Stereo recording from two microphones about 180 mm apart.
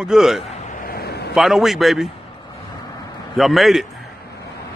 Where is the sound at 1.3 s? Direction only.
Centre (ahead or behind).